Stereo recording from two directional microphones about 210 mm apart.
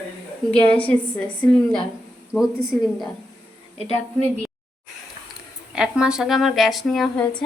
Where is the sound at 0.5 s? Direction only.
25° left (ahead or behind).